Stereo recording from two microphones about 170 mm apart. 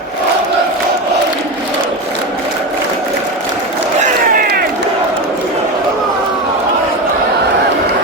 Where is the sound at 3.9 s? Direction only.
50° right (ahead or behind).